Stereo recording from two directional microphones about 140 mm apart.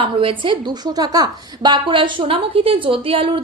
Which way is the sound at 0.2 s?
40° right (ahead or behind).